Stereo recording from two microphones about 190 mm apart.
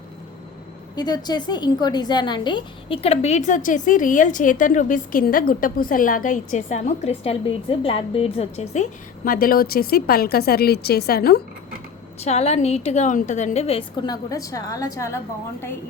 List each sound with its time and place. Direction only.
0.9 s a woman's voice: 20° left (ahead or behind); by 11.4 s 55° left (ahead or behind)
12.2 s a woman's voice: 35° left (ahead or behind); by 15.2 s 15° left (ahead or behind)